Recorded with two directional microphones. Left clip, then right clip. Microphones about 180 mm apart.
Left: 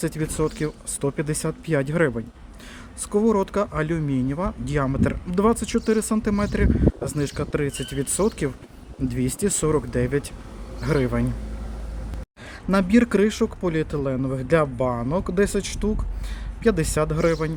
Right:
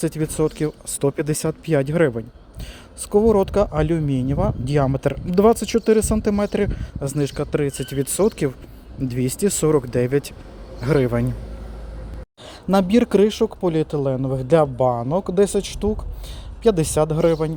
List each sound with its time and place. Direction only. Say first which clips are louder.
0.0 s speech: right 4 dB; 20° right (ahead or behind)
12.6 s a man's voice: right 3 dB; 20° right (ahead or behind)